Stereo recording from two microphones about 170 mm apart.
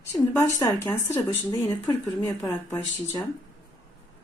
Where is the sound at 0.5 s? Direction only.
15° left (ahead or behind).